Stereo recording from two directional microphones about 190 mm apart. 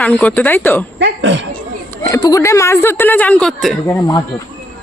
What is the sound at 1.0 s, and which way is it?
Speech, 70° right (ahead or behind).